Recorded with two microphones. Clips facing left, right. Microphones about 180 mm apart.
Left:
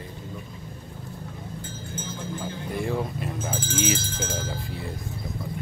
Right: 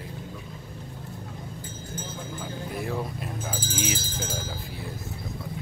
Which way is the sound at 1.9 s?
40° right (ahead or behind).